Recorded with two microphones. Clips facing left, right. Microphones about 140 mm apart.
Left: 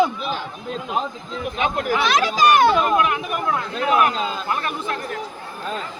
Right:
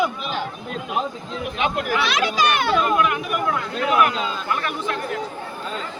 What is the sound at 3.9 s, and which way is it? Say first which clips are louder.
Speech: even; 40° left (ahead or behind).